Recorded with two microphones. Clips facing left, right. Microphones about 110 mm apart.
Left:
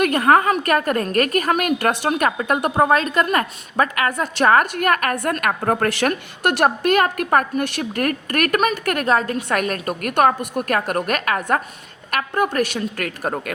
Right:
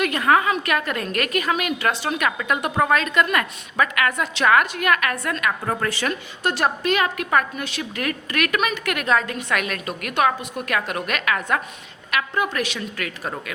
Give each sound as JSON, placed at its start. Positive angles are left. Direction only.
{"t": 0.0, "sound": "a woman's voice", "side_deg": 45}
{"t": 5.9, "sound": "a woman's voice", "side_deg": 65}
{"t": 6.8, "sound": "a woman's voice", "side_deg": 50}